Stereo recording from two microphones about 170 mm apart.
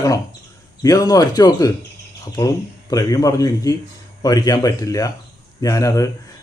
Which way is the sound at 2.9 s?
20° left (ahead or behind).